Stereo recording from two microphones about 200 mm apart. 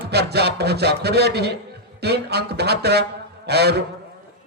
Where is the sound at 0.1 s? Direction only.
55° right (ahead or behind).